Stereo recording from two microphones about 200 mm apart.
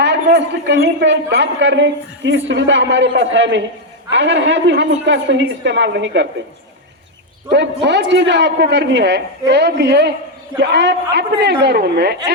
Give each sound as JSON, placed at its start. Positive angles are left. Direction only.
{"t": 0.0, "sound": "a man's voice", "side_deg": -60}
{"t": 7.5, "sound": "a man's voice", "side_deg": -60}